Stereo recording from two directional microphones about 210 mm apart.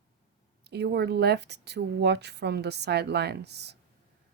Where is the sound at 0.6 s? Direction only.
50° right (ahead or behind).